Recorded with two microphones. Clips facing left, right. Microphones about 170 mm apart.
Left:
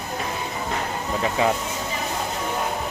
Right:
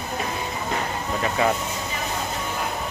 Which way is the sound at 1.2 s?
15° left (ahead or behind).